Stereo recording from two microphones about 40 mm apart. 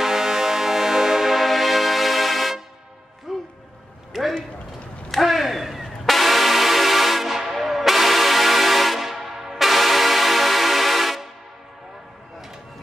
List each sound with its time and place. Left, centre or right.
0.0 s music: centre